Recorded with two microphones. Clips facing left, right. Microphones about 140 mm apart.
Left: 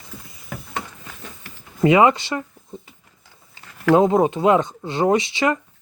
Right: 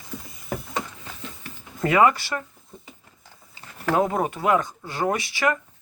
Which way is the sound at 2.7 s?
20° left (ahead or behind).